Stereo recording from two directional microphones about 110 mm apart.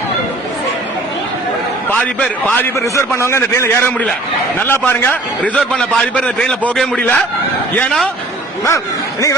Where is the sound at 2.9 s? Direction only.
25° left (ahead or behind).